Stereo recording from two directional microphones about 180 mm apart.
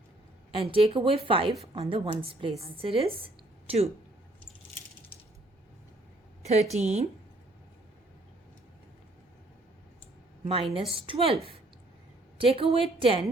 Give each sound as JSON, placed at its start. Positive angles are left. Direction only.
{"t": 0.6, "sound": "a woman's voice", "side_deg": -35}
{"t": 6.4, "sound": "a woman's voice", "side_deg": -35}
{"t": 10.4, "sound": "a woman's voice", "side_deg": -35}
{"t": 12.5, "sound": "a woman's voice", "side_deg": -30}